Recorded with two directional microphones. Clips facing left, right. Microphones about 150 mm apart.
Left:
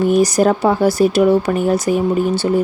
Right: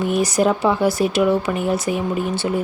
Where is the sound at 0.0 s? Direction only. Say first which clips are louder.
Left 5 dB; 40° left (ahead or behind).